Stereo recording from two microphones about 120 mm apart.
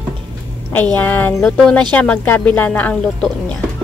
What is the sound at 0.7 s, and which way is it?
A woman's voice, 15° left (ahead or behind).